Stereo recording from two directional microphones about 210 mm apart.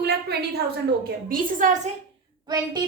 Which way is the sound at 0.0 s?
50° right (ahead or behind).